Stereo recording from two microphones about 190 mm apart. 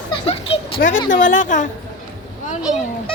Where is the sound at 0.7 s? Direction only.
45° left (ahead or behind).